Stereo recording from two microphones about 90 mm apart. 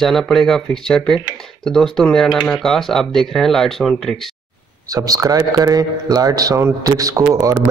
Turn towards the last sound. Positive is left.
turn(degrees=-35)  # may be behind; listen again after turning